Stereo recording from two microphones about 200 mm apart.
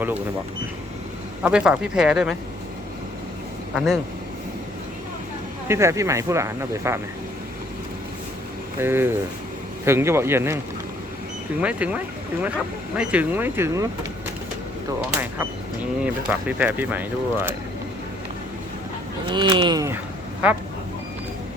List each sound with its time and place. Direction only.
1.4 s speech: 5° right (ahead or behind)
5.6 s speech: 15° right (ahead or behind)
8.8 s speech: 10° right (ahead or behind)
11.6 s speech: 5° right (ahead or behind)
15.2 s speech: 10° right (ahead or behind)
19.2 s speech: 25° right (ahead or behind)
20.4 s speech: 5° right (ahead or behind)